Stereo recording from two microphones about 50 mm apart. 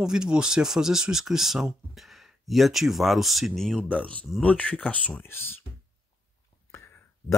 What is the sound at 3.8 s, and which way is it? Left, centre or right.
Speech, left.